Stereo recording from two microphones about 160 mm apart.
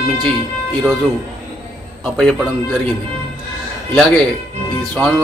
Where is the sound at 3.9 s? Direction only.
5° left (ahead or behind).